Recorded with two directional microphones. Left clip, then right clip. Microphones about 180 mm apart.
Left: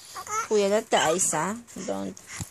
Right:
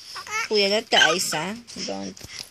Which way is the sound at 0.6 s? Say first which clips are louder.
Right 6 dB; centre (ahead or behind).